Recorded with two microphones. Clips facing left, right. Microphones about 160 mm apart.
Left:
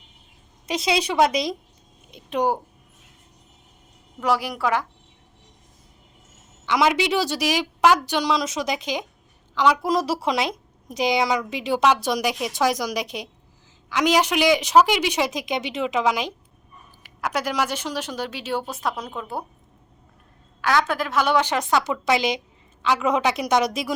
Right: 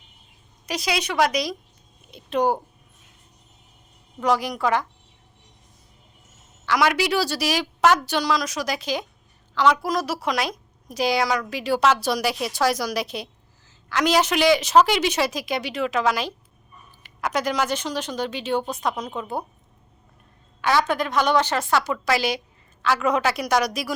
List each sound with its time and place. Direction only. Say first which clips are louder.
0.7 s a woman's voice: left 3 dB; 25° left (ahead or behind)
2.0 s speech: right 1 dB; 15° left (ahead or behind)
4.2 s speech: right 1 dB; 10° left (ahead or behind)
6.7 s a woman's voice: left 1 dB; 20° left (ahead or behind)
9.8 s a woman's voice: left 3 dB; 30° left (ahead or behind); by 19.5 s centre (ahead or behind)
20.6 s a woman's voice: right 1 dB; centre (ahead or behind); by 23.9 s 25° left (ahead or behind)